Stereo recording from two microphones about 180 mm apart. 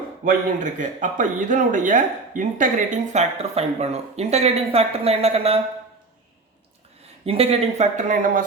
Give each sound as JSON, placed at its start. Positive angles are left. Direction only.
{"t": 0.3, "sound": "speech", "side_deg": -45}
{"t": 7.3, "sound": "speech", "side_deg": -35}